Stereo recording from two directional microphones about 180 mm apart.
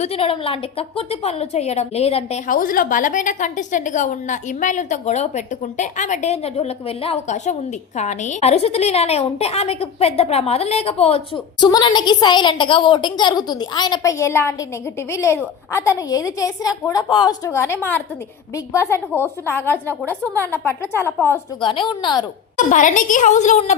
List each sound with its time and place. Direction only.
0.0 s a woman's voice: 35° left (ahead or behind)
2.5 s a woman's voice: 50° left (ahead or behind); by 20.0 s 10° left (ahead or behind)
20.2 s a woman's voice: 15° right (ahead or behind)
20.5 s a woman's voice: 10° left (ahead or behind)
21.6 s a woman's voice: 25° left (ahead or behind)
22.5 s a woman's voice: 45° left (ahead or behind)